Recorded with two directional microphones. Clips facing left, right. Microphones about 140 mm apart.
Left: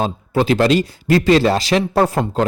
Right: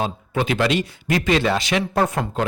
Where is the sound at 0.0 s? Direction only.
35° left (ahead or behind).